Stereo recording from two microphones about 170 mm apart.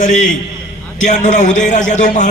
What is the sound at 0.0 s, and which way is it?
A man's voice, 45° left (ahead or behind).